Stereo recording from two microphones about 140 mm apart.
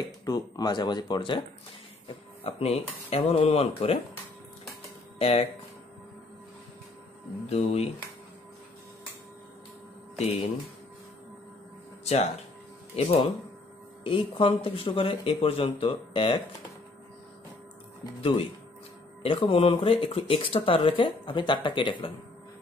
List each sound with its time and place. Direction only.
0.2 s speech: 30° left (ahead or behind)
2.0 s speech: 45° left (ahead or behind)
5.2 s speech: 45° left (ahead or behind)
7.4 s speech: 45° left (ahead or behind)
10.1 s speech: 45° left (ahead or behind)
12.1 s speech: 50° left (ahead or behind)
18.0 s speech: 40° left (ahead or behind)